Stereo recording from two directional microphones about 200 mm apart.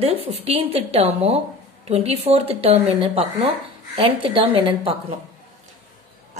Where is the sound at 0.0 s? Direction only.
30° right (ahead or behind).